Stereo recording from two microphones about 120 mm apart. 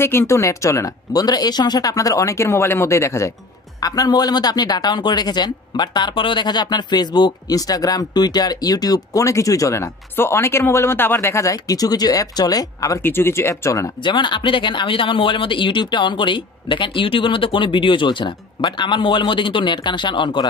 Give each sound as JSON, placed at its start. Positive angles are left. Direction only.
{"t": 0.0, "sound": "speech", "side_deg": 20}
{"t": 13.0, "sound": "speech", "side_deg": 20}
{"t": 14.0, "sound": "speech", "side_deg": 40}